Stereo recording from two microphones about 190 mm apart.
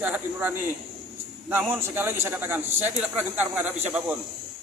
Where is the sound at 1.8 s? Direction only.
10° right (ahead or behind).